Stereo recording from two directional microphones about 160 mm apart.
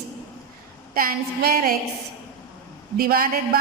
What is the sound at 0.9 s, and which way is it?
Speech, 65° right (ahead or behind).